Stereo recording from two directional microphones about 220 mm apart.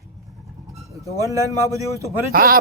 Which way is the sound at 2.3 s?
40° right (ahead or behind).